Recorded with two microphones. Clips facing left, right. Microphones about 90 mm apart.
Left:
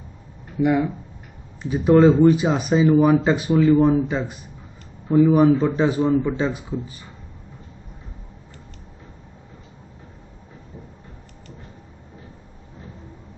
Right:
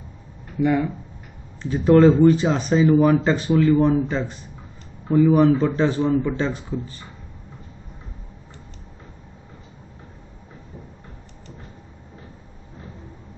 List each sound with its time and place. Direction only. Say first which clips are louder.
0.6 s speech: left 1 dB; 15° left (ahead or behind)